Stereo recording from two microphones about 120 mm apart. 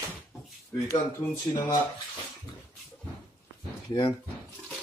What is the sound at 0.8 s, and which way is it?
Speech, 25° left (ahead or behind).